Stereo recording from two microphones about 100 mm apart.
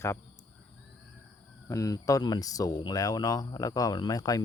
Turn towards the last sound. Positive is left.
turn(degrees=35)  # may be behind; listen again after turning